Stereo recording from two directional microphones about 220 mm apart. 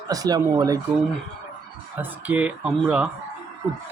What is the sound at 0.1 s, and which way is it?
Speech, 15° right (ahead or behind).